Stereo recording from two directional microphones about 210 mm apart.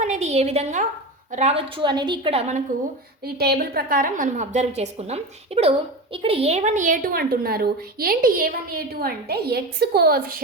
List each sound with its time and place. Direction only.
0.0 s a woman's voice: 35° right (ahead or behind)
3.2 s a woman's voice: 50° right (ahead or behind)